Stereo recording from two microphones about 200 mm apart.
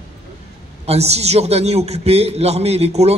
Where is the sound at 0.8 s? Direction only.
30° right (ahead or behind).